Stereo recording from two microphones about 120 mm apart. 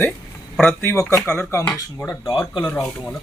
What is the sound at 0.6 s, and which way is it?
A man's voice, 15° left (ahead or behind).